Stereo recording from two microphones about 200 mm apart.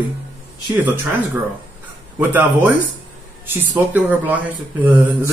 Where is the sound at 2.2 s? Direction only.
10° right (ahead or behind).